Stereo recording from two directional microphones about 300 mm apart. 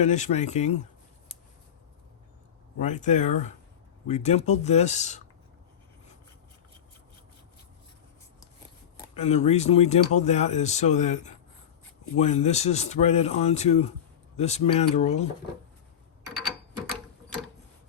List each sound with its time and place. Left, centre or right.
0.0 s speech: left
2.7 s speech: left
9.1 s speech: left